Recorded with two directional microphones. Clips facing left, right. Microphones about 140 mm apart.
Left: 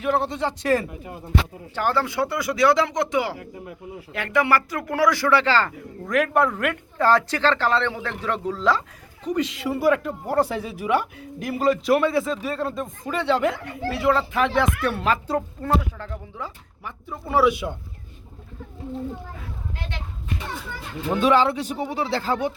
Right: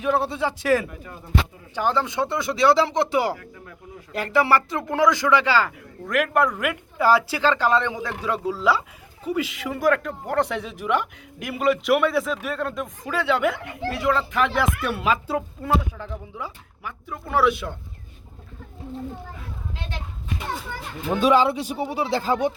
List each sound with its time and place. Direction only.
0.0 s speech: 10° right (ahead or behind)
0.7 s speech: 25° left (ahead or behind)
1.7 s speech: 15° right (ahead or behind); by 10.1 s 5° left (ahead or behind)
10.3 s speech: 20° left (ahead or behind)
10.8 s speech: 10° left (ahead or behind); by 16.9 s 10° right (ahead or behind)
17.1 s speech: 5° left (ahead or behind)
21.2 s speech: 10° right (ahead or behind)